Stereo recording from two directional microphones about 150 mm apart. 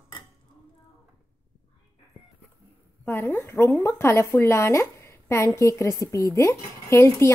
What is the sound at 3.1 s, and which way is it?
A woman's voice, 15° left (ahead or behind).